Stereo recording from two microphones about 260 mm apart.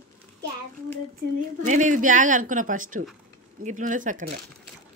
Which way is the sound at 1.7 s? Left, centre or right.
Right.